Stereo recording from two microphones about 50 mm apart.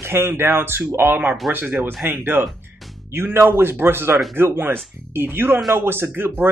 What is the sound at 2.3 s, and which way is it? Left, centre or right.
Speech, right.